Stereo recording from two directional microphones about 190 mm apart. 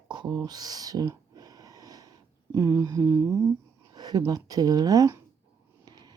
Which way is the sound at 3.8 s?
20° right (ahead or behind).